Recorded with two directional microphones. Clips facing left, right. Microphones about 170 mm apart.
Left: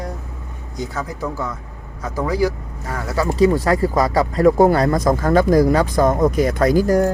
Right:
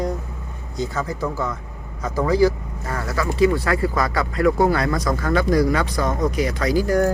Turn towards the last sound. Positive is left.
turn(degrees=50)  # may be behind; listen again after turning